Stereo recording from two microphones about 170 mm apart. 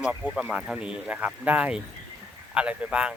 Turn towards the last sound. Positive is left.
turn(degrees=-5)  # may be behind; listen again after turning